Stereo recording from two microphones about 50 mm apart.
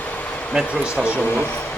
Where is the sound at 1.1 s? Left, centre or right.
Left.